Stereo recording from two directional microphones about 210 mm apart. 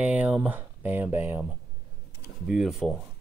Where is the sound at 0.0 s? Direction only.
5° right (ahead or behind).